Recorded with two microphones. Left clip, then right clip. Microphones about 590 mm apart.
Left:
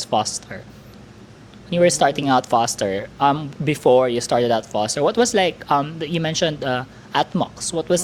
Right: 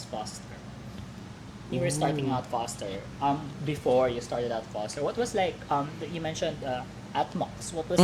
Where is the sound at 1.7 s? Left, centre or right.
Left.